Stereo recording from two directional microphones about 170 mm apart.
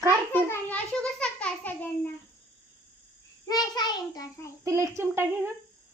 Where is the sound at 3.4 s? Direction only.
25° left (ahead or behind).